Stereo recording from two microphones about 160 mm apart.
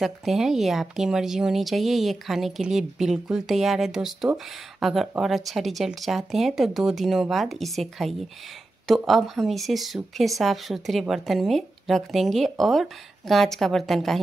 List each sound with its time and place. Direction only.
0.0 s speech: centre (ahead or behind)